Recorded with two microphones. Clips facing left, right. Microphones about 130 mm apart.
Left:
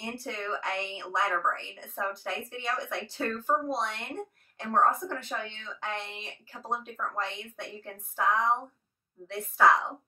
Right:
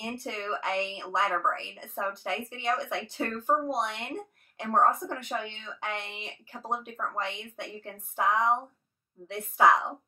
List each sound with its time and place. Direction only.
0.0 s a woman's voice: 20° right (ahead or behind)